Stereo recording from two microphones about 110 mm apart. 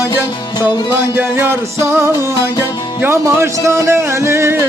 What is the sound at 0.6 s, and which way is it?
Speech, 20° right (ahead or behind).